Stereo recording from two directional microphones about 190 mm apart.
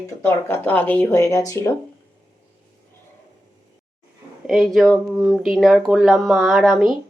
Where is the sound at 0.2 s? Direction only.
10° left (ahead or behind).